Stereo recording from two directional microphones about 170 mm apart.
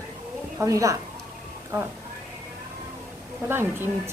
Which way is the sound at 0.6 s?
20° right (ahead or behind).